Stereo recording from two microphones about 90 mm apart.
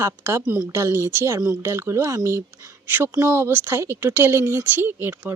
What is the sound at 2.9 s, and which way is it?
Speech, 20° right (ahead or behind).